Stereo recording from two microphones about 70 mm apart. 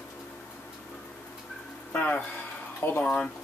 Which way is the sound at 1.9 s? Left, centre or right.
Left.